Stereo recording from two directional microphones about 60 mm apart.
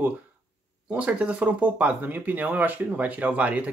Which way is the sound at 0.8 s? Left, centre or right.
Right.